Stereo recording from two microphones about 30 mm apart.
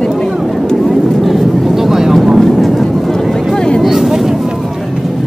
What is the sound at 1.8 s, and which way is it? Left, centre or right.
Vehicle, centre.